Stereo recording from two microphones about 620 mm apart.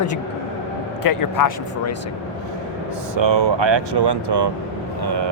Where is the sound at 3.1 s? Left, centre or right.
Right.